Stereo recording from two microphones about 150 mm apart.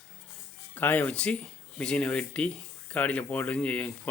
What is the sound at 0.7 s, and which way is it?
Speech, 10° left (ahead or behind).